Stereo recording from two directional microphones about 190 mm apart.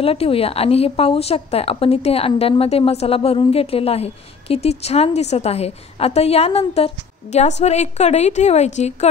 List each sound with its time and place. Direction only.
0.0 s a woman's voice: 30° left (ahead or behind)